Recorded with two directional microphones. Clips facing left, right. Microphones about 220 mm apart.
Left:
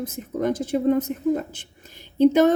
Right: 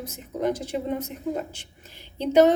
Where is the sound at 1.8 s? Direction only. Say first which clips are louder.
Left 12 dB; 45° left (ahead or behind).